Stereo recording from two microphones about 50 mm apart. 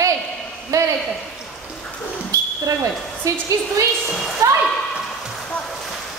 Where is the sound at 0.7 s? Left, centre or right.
Right.